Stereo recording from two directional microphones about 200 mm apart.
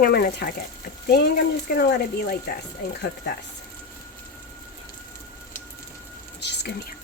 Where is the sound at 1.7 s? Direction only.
55° left (ahead or behind).